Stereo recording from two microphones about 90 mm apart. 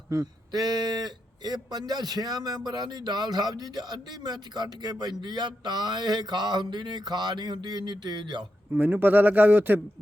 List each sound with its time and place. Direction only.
0.1 s speech: 45° right (ahead or behind); by 8.4 s 60° right (ahead or behind)
8.7 s speech: 20° right (ahead or behind)